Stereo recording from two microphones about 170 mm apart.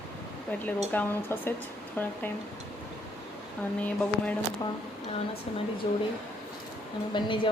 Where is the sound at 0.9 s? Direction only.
10° left (ahead or behind).